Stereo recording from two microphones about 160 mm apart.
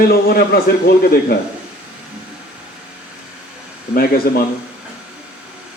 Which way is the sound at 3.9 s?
75° left (ahead or behind).